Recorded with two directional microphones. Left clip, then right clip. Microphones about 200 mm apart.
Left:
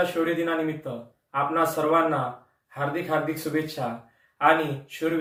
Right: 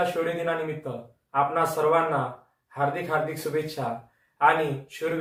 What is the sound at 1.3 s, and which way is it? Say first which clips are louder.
A man's voice: even; 20° right (ahead or behind).